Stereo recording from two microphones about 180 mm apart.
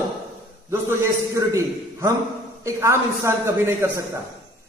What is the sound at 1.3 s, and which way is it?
A man's voice, 15° right (ahead or behind).